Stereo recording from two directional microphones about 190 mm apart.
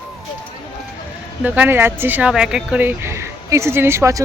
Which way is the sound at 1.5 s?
10° right (ahead or behind).